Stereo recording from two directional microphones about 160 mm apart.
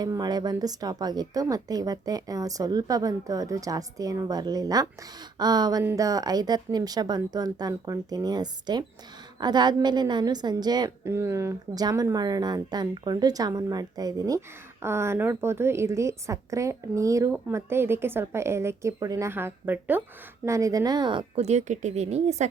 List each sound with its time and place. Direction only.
0.0 s a woman's voice: 25° right (ahead or behind)
21.4 s speech: 45° right (ahead or behind)